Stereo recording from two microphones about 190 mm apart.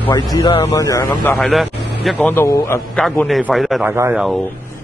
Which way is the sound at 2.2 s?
10° left (ahead or behind).